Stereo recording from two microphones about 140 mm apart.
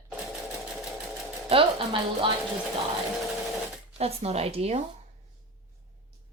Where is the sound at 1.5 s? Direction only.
40° right (ahead or behind).